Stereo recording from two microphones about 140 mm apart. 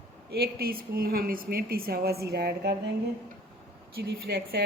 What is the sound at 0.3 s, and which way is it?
A woman's voice, 90° right.